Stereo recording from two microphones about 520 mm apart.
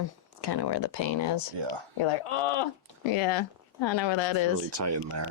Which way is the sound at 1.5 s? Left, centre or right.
Right.